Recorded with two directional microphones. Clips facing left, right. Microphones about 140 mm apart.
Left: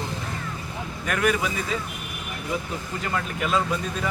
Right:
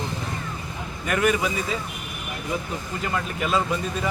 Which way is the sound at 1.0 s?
5° right (ahead or behind).